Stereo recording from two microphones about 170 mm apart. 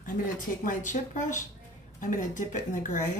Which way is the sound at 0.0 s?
50° left (ahead or behind).